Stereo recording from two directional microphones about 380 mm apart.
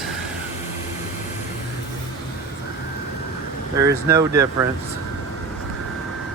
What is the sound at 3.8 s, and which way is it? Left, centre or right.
Speech, centre.